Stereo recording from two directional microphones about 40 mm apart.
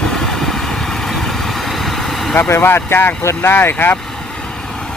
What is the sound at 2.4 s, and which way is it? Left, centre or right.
Speech, left.